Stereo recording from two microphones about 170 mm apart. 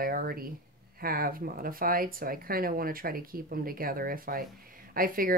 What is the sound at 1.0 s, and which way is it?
A woman's voice, 60° right (ahead or behind).